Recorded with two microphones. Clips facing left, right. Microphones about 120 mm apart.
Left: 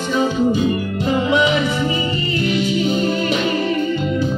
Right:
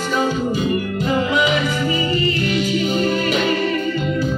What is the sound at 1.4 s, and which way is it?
Music, 25° left (ahead or behind).